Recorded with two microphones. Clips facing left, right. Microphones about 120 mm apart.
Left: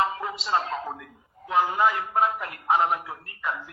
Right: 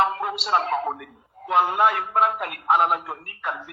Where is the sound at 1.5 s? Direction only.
70° right (ahead or behind).